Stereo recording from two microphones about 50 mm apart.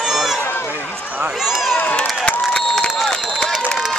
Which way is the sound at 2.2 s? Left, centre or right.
Left.